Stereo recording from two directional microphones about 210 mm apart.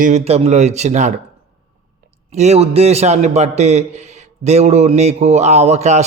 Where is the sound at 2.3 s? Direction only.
30° right (ahead or behind).